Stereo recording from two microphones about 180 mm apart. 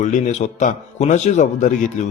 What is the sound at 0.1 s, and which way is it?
Speech, 40° left (ahead or behind).